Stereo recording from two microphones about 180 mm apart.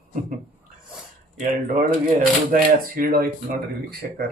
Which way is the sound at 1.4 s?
45° right (ahead or behind).